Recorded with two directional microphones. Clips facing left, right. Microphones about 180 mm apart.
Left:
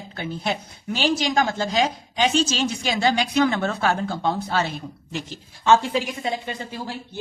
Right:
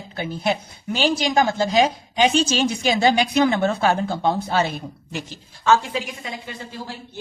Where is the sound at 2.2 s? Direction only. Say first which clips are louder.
Right 3 dB; 15° right (ahead or behind).